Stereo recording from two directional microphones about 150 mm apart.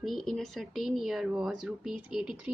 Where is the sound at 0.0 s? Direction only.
Centre (ahead or behind).